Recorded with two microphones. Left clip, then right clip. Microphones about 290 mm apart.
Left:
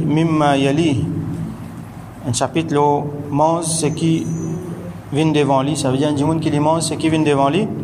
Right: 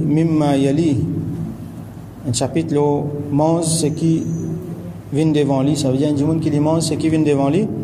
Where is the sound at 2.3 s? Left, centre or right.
Centre.